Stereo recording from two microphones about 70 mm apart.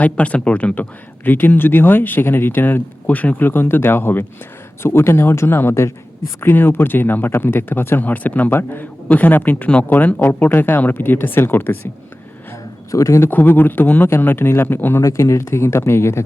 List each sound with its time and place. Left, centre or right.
0.0 s speech: centre
12.9 s a man's voice: left
13.2 s speech: left
15.0 s speech: left